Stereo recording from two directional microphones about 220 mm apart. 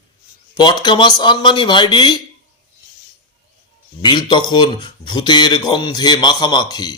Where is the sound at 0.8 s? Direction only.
20° left (ahead or behind).